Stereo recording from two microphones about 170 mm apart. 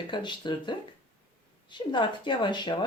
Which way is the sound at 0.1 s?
25° left (ahead or behind).